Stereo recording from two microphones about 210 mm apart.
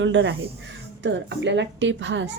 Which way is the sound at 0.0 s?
60° right (ahead or behind).